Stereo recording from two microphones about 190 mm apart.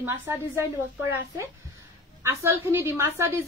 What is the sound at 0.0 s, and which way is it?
Speech, 15° right (ahead or behind).